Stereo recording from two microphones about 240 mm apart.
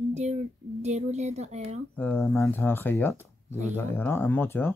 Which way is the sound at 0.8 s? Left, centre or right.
Right.